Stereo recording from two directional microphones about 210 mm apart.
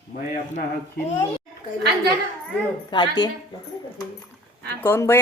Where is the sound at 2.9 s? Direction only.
20° left (ahead or behind).